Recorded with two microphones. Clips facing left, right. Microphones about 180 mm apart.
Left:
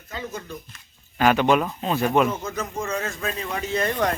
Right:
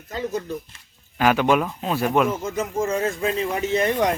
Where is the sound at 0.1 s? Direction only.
35° right (ahead or behind).